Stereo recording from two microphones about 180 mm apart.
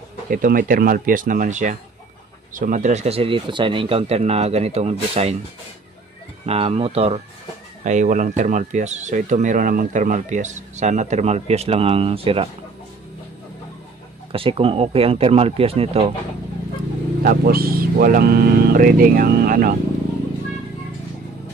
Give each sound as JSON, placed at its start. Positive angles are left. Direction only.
{"t": 0.3, "sound": "speech", "side_deg": -50}
{"t": 6.4, "sound": "speech", "side_deg": -35}
{"t": 7.8, "sound": "speech", "side_deg": -45}
{"t": 14.3, "sound": "speech", "side_deg": -30}
{"t": 17.2, "sound": "speech", "side_deg": -55}